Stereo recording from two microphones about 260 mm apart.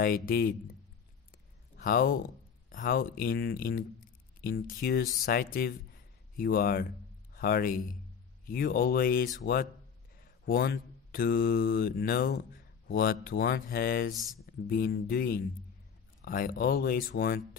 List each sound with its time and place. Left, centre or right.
0.0 s speech: left
1.8 s a man's voice: left
14.1 s speech: centre
14.4 s speech: left